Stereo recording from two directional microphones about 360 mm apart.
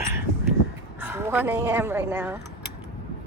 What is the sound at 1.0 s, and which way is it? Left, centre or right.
Speech, centre.